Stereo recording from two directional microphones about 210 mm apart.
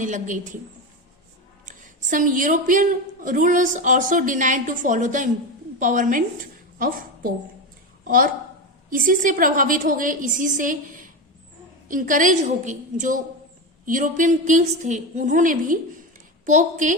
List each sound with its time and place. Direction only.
0.0 s speech: 35° right (ahead or behind)
1.6 s speech: 40° right (ahead or behind)
6.7 s a sound: 40° right (ahead or behind)
8.0 s a woman's voice: 40° right (ahead or behind)